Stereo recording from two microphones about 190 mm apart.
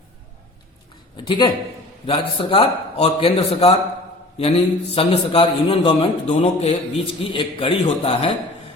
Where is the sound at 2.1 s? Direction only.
30° left (ahead or behind).